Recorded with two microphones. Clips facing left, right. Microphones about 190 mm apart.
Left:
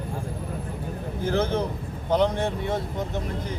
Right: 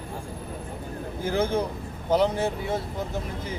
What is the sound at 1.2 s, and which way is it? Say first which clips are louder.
Speech: even; 10° right (ahead or behind).